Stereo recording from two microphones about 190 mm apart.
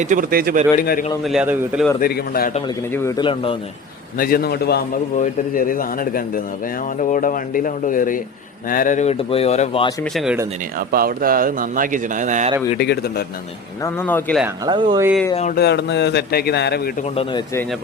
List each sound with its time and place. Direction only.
0.0 s speech: 45° right (ahead or behind)
0.8 s a man's voice: 45° left (ahead or behind)
1.2 s a man's voice: 5° right (ahead or behind)
2.0 s a man's voice: 55° left (ahead or behind)
2.5 s a man's voice: 30° left (ahead or behind)
4.2 s speech: 50° left (ahead or behind)
5.1 s a man's voice: 45° left (ahead or behind)
10.0 s a man's voice: centre (ahead or behind)
10.8 s speech: 50° right (ahead or behind)
12.8 s speech: 55° left (ahead or behind)
13.8 s a man's voice: 10° left (ahead or behind)
14.6 s speech: 25° right (ahead or behind)
15.5 s speech: 60° left (ahead or behind)
17.3 s a man's voice: 15° left (ahead or behind)